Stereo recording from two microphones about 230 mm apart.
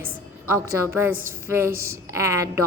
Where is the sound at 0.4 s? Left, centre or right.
Centre.